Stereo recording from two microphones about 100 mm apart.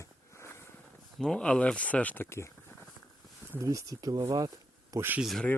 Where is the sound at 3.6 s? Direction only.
35° right (ahead or behind).